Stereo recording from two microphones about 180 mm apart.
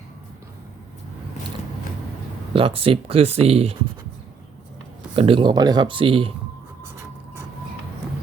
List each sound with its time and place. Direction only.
2.5 s speech: 30° right (ahead or behind)
5.1 s speech: 30° right (ahead or behind)